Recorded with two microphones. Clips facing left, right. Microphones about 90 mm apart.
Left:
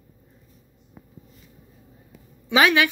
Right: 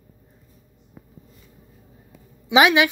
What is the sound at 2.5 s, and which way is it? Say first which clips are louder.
Speech: right 3 dB; 15° right (ahead or behind).